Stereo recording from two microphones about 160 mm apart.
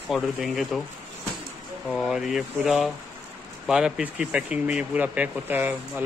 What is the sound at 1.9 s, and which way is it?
Speech, centre (ahead or behind).